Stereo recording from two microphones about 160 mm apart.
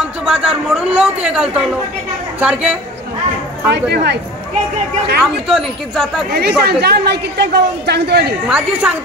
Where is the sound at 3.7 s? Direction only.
90° right.